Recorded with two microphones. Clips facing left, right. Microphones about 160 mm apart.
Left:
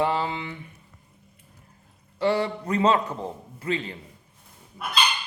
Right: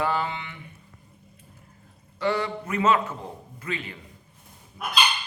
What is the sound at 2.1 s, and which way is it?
A man's voice, 30° left (ahead or behind).